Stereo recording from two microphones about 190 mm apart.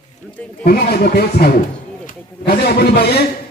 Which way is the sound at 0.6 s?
50° left (ahead or behind).